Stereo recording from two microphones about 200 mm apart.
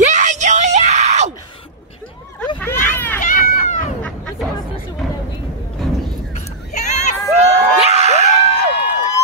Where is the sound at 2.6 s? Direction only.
10° left (ahead or behind).